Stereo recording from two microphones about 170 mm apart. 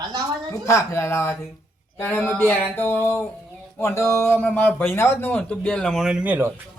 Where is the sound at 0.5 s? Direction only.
15° left (ahead or behind); by 6.5 s 10° right (ahead or behind).